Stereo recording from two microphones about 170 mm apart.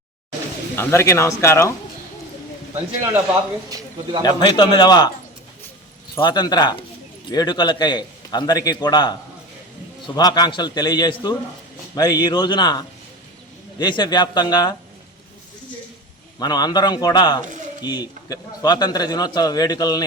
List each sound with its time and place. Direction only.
0.8 s speech: 15° left (ahead or behind)
4.2 s a man's voice: 25° left (ahead or behind)
6.1 s a man's voice: 25° left (ahead or behind)
10.2 s a man's voice: 25° left (ahead or behind)
16.4 s a man's voice: 25° left (ahead or behind)
17.4 s speech: 45° right (ahead or behind)
17.8 s a man's voice: 25° left (ahead or behind)